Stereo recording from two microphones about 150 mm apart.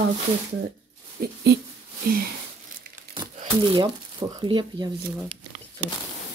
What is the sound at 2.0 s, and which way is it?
Speech, 85° right.